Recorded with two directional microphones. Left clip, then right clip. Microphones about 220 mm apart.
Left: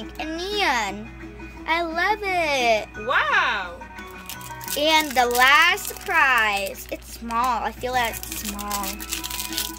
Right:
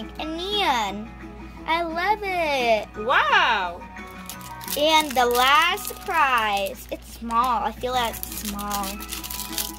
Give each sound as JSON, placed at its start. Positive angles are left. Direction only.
{"t": 0.2, "sound": "music", "side_deg": 0}
{"t": 1.7, "sound": "a child's voice", "side_deg": 0}
{"t": 3.1, "sound": "speech", "side_deg": -30}
{"t": 4.7, "sound": "a child's voice", "side_deg": 5}